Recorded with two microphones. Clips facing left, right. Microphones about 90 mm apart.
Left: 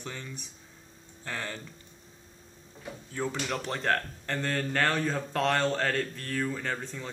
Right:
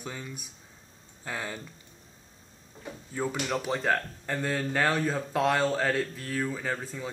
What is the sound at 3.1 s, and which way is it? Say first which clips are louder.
Speech: right 2 dB; 5° right (ahead or behind).